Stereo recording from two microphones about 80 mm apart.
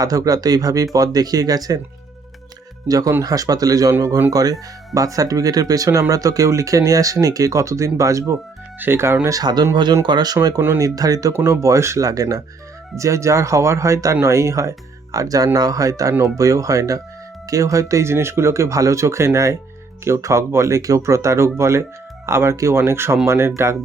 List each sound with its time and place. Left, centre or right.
0.0 s speech: right
2.8 s speech: right
9.4 s speech: right
10.3 s speech: right